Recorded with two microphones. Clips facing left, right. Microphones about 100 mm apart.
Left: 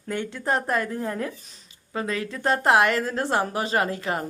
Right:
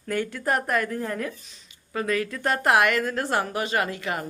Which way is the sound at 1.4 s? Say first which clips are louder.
Even; 40° left (ahead or behind).